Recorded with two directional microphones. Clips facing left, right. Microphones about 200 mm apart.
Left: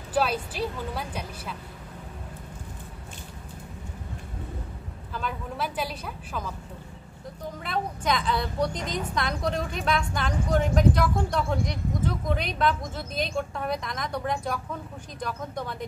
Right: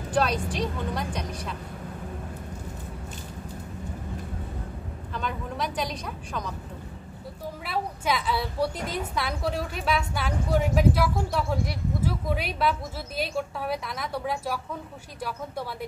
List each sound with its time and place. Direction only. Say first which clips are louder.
0.1 s speech: right 1 dB; 5° left (ahead or behind)
5.1 s speech: right 1 dB; 5° left (ahead or behind)
7.6 s a woman's voice: even; 5° right (ahead or behind)